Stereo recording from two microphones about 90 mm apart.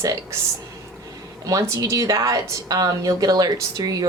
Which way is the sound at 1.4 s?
40° right (ahead or behind).